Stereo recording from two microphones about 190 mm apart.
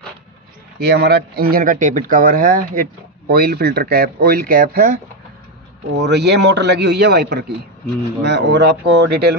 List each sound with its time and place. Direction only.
0.7 s speech: 60° right (ahead or behind)
6.0 s a man's voice: 60° right (ahead or behind)